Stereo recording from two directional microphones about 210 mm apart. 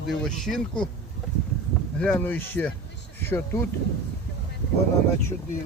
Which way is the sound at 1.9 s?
5° left (ahead or behind).